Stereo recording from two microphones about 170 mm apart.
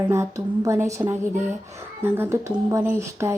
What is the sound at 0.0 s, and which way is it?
A woman's voice, 15° right (ahead or behind).